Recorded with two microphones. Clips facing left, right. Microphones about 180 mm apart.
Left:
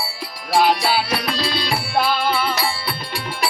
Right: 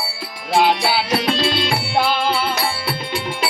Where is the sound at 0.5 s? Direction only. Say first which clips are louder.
Even; 20° right (ahead or behind).